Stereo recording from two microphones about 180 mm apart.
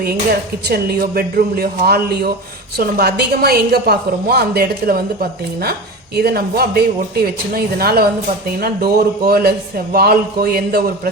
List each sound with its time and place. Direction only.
0.0 s a man's voice: 60° right (ahead or behind)
6.1 s a man's voice: 60° right (ahead or behind)